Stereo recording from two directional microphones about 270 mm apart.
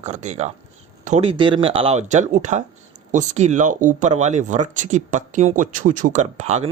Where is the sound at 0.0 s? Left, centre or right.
Right.